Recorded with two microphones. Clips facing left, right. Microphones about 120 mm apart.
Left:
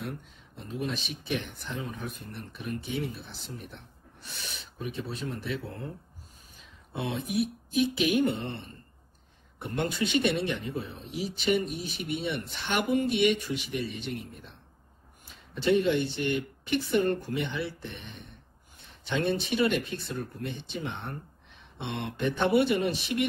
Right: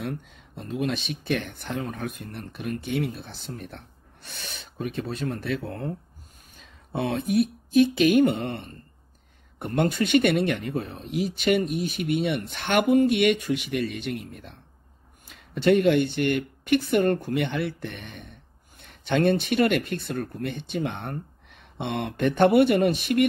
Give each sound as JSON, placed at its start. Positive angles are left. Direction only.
{"t": 0.6, "sound": "speech", "side_deg": -75}
{"t": 6.9, "sound": "speech", "side_deg": -60}
{"t": 15.6, "sound": "speech", "side_deg": -65}